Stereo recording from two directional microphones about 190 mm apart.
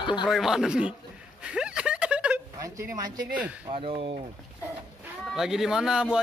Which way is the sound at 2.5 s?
15° right (ahead or behind).